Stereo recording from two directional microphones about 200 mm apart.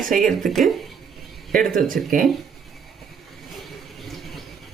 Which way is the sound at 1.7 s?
45° right (ahead or behind).